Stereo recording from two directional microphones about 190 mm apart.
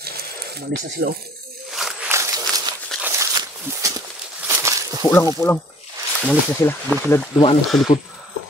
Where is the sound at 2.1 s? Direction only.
15° right (ahead or behind).